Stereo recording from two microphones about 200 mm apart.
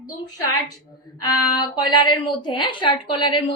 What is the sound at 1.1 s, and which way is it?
A woman's voice, 20° left (ahead or behind).